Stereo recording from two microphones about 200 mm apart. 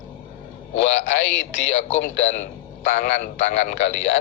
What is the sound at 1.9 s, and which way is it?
A man's voice, 35° left (ahead or behind).